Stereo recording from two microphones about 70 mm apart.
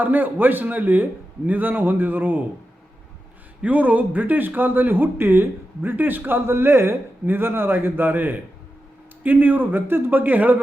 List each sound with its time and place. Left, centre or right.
0.0 s speech: right
3.6 s speech: right